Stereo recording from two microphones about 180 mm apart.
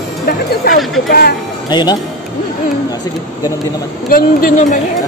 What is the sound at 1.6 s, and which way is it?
Speech, 25° left (ahead or behind).